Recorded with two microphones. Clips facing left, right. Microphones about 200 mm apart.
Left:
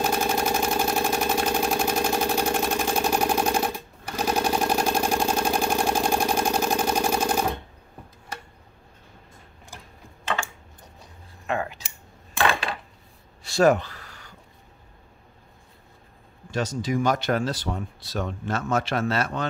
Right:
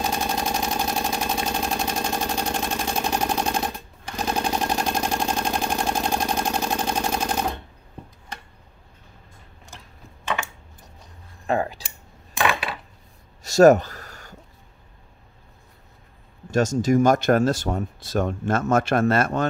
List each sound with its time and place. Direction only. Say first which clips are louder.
0.0 s engine: left 2 dB; 5° left (ahead or behind)
10.2 s typing: right 1 dB; 15° right (ahead or behind)
11.4 s scissors: right 4 dB; 35° right (ahead or behind)
13.4 s a sound: right 6 dB; 45° right (ahead or behind)
16.4 s speech: right 7 dB; 45° right (ahead or behind)